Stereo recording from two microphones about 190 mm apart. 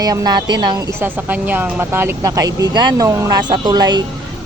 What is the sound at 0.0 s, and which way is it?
A woman's voice, 20° right (ahead or behind).